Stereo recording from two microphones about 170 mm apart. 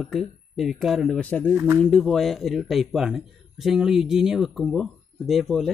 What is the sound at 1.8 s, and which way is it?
Speech, 5° left (ahead or behind).